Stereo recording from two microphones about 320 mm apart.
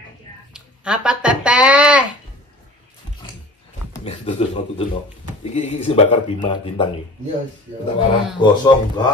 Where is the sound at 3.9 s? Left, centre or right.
Centre.